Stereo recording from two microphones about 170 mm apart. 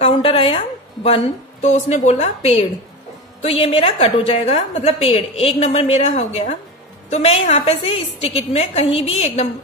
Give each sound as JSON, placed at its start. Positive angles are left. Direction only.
{"t": 0.0, "sound": "a woman's voice", "side_deg": 35}